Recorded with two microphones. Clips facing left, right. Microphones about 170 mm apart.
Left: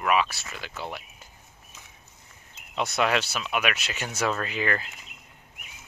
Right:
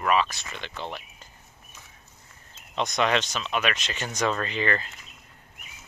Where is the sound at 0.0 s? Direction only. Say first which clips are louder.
Even; 10° left (ahead or behind).